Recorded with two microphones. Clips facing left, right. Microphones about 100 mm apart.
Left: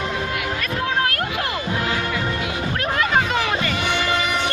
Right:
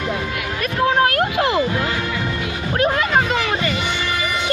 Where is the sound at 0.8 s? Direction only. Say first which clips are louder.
Right 7 dB; 25° right (ahead or behind).